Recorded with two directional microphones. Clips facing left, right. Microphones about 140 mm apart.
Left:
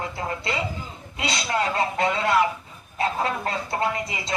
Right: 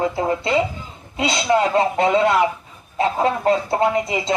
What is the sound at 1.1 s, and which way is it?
Speech, 25° right (ahead or behind).